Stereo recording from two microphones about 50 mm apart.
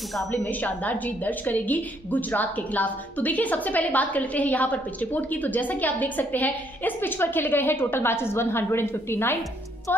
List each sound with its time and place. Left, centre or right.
0.5 s a woman's voice: left